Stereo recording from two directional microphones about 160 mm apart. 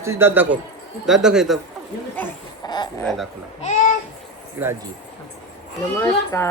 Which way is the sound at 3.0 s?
Centre (ahead or behind).